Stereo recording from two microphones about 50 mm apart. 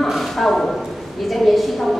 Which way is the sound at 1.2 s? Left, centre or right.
Centre.